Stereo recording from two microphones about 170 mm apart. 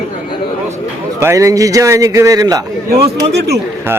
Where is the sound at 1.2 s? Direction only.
15° right (ahead or behind).